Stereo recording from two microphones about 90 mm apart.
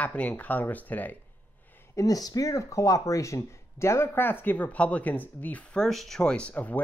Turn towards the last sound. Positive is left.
turn(degrees=15)  # may be behind; listen again after turning